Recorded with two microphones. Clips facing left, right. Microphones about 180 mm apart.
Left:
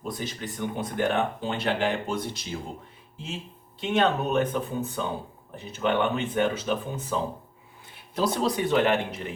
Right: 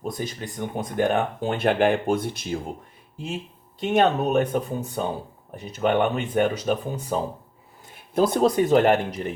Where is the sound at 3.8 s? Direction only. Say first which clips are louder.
Right 4 dB; 45° right (ahead or behind).